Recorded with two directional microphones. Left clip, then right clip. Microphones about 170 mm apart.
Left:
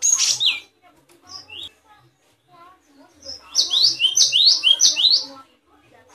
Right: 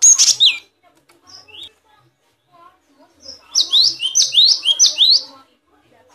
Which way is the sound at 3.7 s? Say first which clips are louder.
Right 2 dB; 15° right (ahead or behind).